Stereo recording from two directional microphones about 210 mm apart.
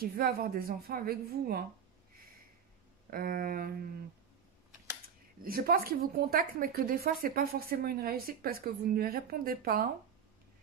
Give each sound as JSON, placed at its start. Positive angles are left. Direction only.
{"t": 0.0, "sound": "a woman's voice", "side_deg": -45}
{"t": 3.1, "sound": "a woman's voice", "side_deg": -45}
{"t": 5.4, "sound": "a woman's voice", "side_deg": -45}